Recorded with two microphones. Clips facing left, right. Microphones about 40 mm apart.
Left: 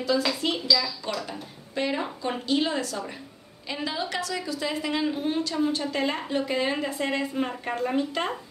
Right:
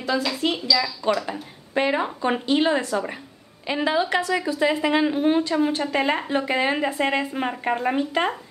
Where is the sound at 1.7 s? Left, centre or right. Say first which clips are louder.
Right 6 dB; right.